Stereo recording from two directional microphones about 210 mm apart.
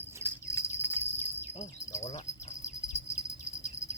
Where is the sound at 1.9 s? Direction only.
30° left (ahead or behind).